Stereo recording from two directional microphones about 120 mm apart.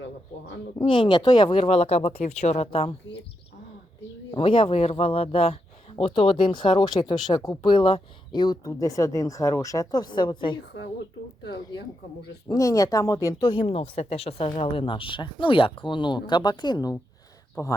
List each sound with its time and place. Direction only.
0.8 s speech: 45° left (ahead or behind); by 2.2 s 60° left (ahead or behind)
2.2 s speech: 70° left (ahead or behind)
2.6 s speech: 55° left (ahead or behind)
4.3 s speech: 45° left (ahead or behind)
7.6 s speech: 45° left (ahead or behind)
12.5 s speech: 30° left (ahead or behind)